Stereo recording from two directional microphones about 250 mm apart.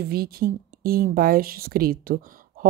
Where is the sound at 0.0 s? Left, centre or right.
Right.